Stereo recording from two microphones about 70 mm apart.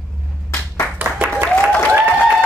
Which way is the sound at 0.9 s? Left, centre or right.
Right.